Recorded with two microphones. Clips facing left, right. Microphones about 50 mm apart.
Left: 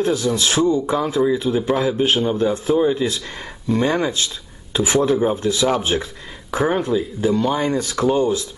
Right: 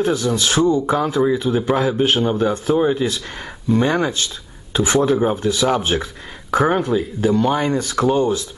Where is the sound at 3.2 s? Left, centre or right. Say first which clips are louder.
Right 1 dB; right.